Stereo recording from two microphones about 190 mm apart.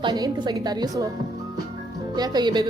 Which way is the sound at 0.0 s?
20° right (ahead or behind).